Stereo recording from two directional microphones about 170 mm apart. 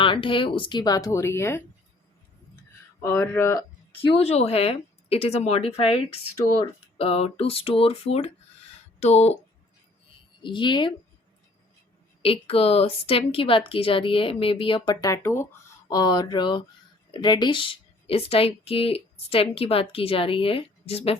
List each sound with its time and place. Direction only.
0.0 s speech: 30° left (ahead or behind); by 1.6 s 15° left (ahead or behind)
3.0 s speech: 15° left (ahead or behind)
4.2 s speech: 35° left (ahead or behind)
10.4 s speech: 25° left (ahead or behind)
12.2 s speech: 35° left (ahead or behind)
15.0 s speech: 15° left (ahead or behind); by 21.2 s 35° left (ahead or behind)